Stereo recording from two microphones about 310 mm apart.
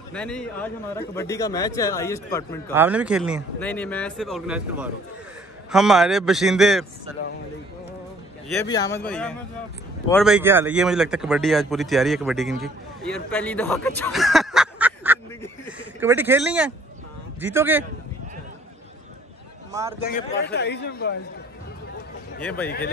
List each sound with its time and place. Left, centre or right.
0.1 s speech: centre
2.7 s a man's voice: centre
8.5 s a man's voice: centre
19.7 s a man's voice: centre
20.1 s a man's voice: left
22.4 s a man's voice: centre